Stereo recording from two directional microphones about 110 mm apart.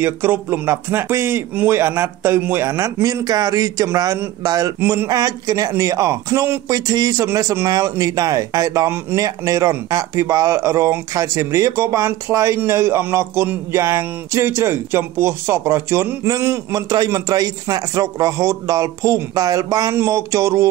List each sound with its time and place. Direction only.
0.0 s a man's voice: 20° right (ahead or behind)